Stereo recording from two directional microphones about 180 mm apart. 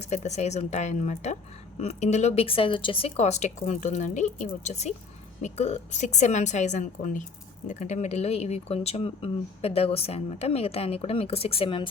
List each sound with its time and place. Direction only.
0.0 s speech: 40° left (ahead or behind)